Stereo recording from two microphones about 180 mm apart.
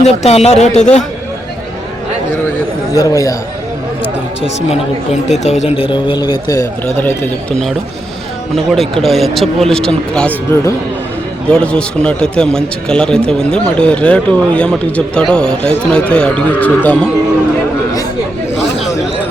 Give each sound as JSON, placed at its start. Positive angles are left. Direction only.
{"t": 0.0, "sound": "speech", "side_deg": 35}
{"t": 2.9, "sound": "a man's voice", "side_deg": 20}
{"t": 5.4, "sound": "a man's voice", "side_deg": 40}
{"t": 8.5, "sound": "a man's voice", "side_deg": 0}
{"t": 11.5, "sound": "a man's voice", "side_deg": 5}